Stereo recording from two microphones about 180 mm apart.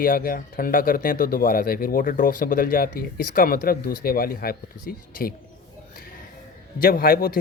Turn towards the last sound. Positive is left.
turn(degrees=55)  # may be behind; listen again after turning